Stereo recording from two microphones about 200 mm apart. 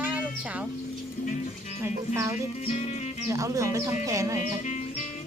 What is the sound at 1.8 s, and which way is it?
Speech, 15° right (ahead or behind).